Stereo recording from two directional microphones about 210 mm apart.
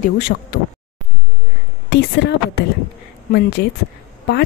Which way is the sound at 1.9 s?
55° left (ahead or behind).